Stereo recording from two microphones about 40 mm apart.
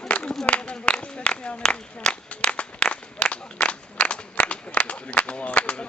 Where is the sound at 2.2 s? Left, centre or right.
Left.